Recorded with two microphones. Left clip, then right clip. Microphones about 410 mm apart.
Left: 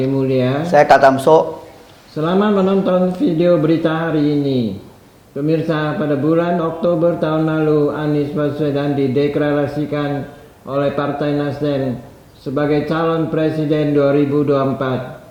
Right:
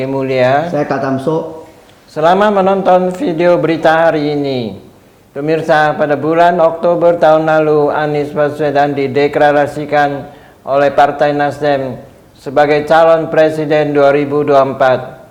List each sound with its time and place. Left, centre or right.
0.2 s a man's voice: right
0.7 s speech: left
2.1 s a man's voice: right